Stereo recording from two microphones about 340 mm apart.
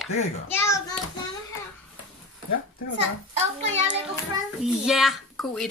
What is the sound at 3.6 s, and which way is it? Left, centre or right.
Speech, centre.